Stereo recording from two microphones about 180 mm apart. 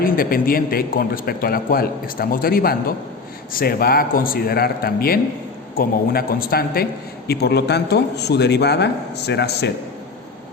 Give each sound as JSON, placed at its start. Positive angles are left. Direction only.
{"t": 0.0, "sound": "a man's voice", "side_deg": 55}